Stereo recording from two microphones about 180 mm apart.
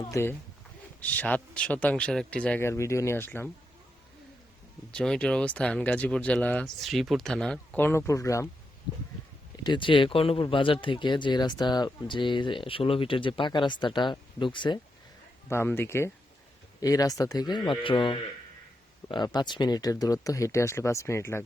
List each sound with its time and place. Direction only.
0.0 s speech: 15° left (ahead or behind)
4.9 s speech: 5° left (ahead or behind)
9.6 s speech: 25° left (ahead or behind)
15.4 s speech: 15° left (ahead or behind)